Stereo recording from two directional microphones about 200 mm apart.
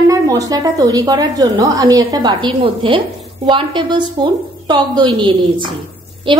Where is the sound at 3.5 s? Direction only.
25° right (ahead or behind).